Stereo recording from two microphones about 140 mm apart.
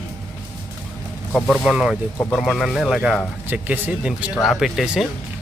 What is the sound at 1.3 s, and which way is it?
Speech, 5° left (ahead or behind).